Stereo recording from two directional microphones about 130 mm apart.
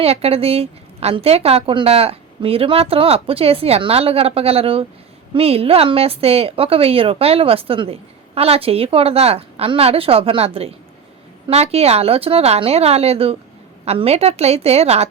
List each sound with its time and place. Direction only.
0.0 s a woman's voice: 50° right (ahead or behind)